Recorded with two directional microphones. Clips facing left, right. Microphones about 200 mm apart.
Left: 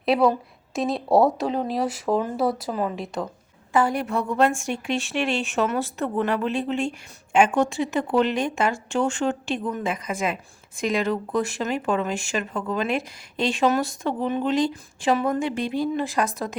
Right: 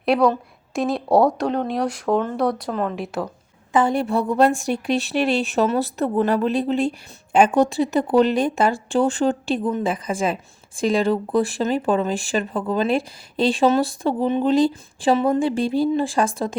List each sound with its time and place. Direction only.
0.0 s a woman's voice: 5° left (ahead or behind)
3.7 s speech: 20° right (ahead or behind)